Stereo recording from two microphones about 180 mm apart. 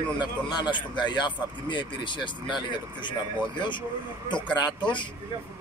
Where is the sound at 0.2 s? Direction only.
25° left (ahead or behind).